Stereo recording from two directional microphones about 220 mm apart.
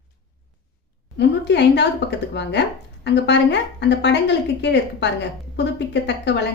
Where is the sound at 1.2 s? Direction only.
50° left (ahead or behind).